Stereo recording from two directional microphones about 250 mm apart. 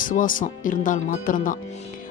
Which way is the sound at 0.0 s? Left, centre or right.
Left.